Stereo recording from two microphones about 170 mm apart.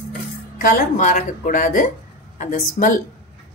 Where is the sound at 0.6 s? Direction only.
55° left (ahead or behind).